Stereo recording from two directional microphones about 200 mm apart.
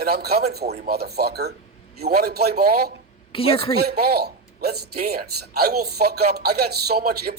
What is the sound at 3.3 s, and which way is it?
Speech, 25° left (ahead or behind).